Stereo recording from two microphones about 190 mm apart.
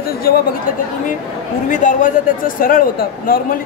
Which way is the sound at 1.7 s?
40° left (ahead or behind).